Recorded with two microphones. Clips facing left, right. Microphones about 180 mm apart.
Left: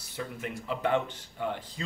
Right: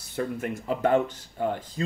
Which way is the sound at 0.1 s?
50° right (ahead or behind).